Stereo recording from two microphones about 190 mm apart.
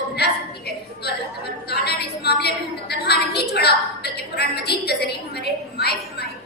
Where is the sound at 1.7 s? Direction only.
60° left (ahead or behind).